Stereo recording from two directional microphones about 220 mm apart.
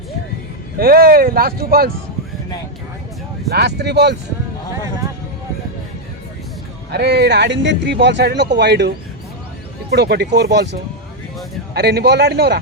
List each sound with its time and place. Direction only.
0.8 s speech: 40° right (ahead or behind)
3.5 s speech: 50° right (ahead or behind)
6.9 s speech: 50° right (ahead or behind)
9.9 s speech: 50° right (ahead or behind)